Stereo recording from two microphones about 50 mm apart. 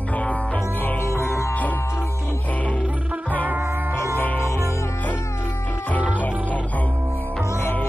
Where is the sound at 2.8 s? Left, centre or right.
Right.